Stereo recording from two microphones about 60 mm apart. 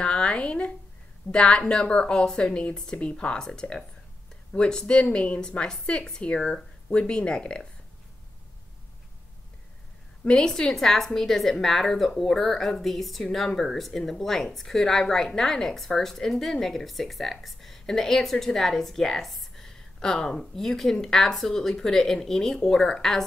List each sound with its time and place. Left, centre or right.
0.0 s a sound: centre
1.3 s a woman's voice: centre
5.4 s a woman's voice: centre
10.2 s a woman's voice: centre